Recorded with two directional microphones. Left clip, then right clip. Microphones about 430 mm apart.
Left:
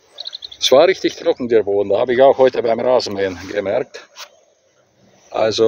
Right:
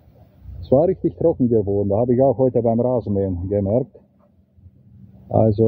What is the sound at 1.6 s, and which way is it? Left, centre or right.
Speech, left.